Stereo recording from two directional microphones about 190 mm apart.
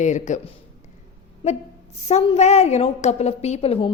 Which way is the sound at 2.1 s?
35° left (ahead or behind).